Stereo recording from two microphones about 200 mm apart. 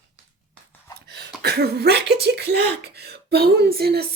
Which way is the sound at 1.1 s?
55° right (ahead or behind).